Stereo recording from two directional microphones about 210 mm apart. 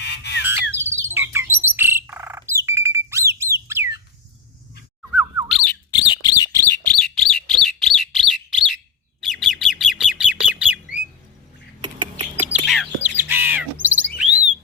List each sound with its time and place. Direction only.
0.0 s bird: 55° left (ahead or behind)
0.4 s bird: 10° right (ahead or behind)
5.5 s squeak: centre (ahead or behind)
6.2 s bird: 15° left (ahead or behind)
6.7 s bird: 5° left (ahead or behind)
11.8 s typing: 25° right (ahead or behind)
12.6 s bird: centre (ahead or behind)
13.0 s a sound: 10° right (ahead or behind)
13.8 s chirp: 10° right (ahead or behind)